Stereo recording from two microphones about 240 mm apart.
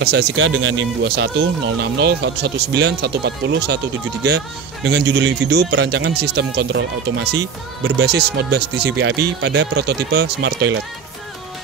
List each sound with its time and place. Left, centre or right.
0.0 s speech: right